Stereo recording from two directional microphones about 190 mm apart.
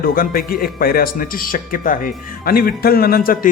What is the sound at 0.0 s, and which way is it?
Speech, 50° left (ahead or behind).